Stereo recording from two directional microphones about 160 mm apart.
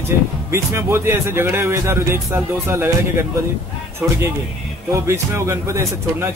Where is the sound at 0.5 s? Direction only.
15° right (ahead or behind).